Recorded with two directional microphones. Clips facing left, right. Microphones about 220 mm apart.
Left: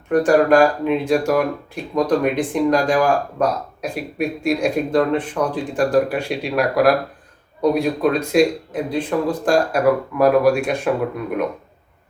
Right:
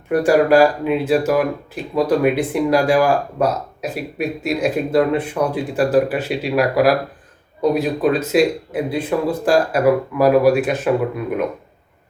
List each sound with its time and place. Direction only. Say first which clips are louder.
0.1 s speech: even; 10° right (ahead or behind)